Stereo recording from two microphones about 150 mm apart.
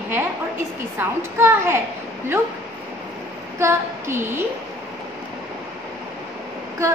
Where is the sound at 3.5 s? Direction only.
20° right (ahead or behind).